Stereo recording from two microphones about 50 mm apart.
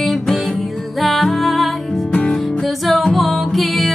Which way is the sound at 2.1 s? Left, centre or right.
Left.